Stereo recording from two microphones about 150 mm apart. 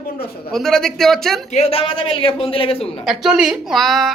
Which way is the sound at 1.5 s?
45° left (ahead or behind).